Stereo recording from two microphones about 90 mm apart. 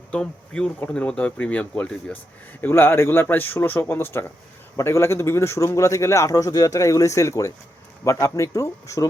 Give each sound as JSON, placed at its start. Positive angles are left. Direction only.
{"t": 0.1, "sound": "a man's voice", "side_deg": 10}